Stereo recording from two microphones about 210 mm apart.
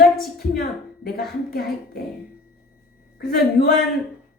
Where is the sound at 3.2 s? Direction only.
45° left (ahead or behind).